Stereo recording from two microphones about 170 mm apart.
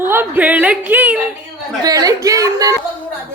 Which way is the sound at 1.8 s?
20° right (ahead or behind).